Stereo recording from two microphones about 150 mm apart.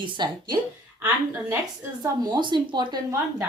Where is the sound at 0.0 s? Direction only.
30° right (ahead or behind).